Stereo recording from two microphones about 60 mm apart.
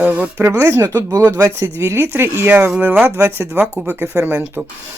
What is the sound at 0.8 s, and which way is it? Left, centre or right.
Speech, right.